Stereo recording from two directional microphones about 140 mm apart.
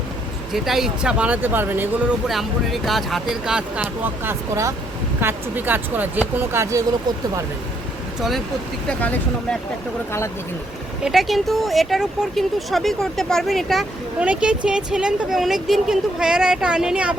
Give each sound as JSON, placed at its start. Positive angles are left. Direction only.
{"t": 0.5, "sound": "speech", "side_deg": 0}
{"t": 2.2, "sound": "speech", "side_deg": 0}
{"t": 3.8, "sound": "speech", "side_deg": -15}
{"t": 8.9, "sound": "speech", "side_deg": 10}
{"t": 11.0, "sound": "speech", "side_deg": 0}